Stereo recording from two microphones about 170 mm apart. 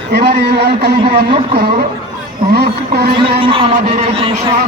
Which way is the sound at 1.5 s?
65° right (ahead or behind).